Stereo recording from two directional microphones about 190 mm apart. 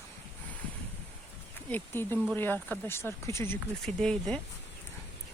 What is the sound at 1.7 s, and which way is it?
Speech, 10° left (ahead or behind).